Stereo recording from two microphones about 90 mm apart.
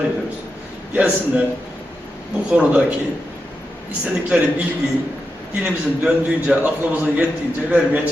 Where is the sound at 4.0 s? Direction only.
15° right (ahead or behind).